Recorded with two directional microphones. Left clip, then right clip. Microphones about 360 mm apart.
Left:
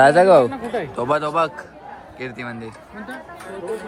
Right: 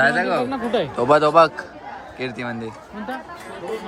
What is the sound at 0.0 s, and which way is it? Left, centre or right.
Speech, centre.